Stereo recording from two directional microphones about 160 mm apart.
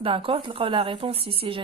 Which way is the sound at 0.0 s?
35° right (ahead or behind).